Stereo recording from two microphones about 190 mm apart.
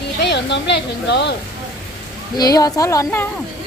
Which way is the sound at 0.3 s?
65° left (ahead or behind).